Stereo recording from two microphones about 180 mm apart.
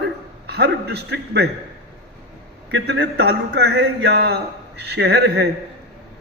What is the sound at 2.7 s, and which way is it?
A man's voice, 70° right (ahead or behind).